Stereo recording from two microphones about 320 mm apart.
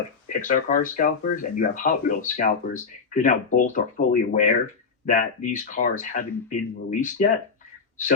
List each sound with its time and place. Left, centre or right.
0.4 s speech: left